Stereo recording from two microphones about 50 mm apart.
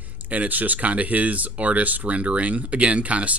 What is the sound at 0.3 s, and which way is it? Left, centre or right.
Speech, right.